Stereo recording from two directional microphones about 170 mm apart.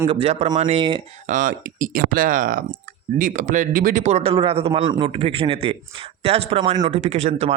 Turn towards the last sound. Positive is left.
turn(degrees=-40)  # may be behind; listen again after turning